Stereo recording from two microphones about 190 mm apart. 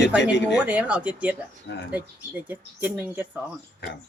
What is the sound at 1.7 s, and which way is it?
Speech, 65° left (ahead or behind).